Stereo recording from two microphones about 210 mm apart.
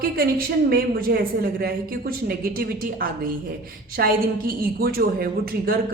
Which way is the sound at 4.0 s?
50° right (ahead or behind).